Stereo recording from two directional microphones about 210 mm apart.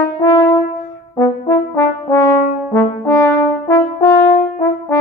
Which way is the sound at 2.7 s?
10° left (ahead or behind).